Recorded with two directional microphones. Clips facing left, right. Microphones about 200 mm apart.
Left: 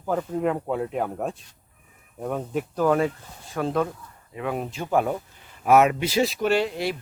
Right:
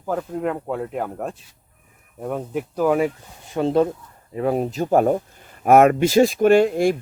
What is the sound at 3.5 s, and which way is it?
Speech, 25° right (ahead or behind).